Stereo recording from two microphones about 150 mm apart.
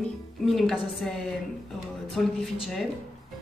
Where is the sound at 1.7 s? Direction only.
Centre (ahead or behind).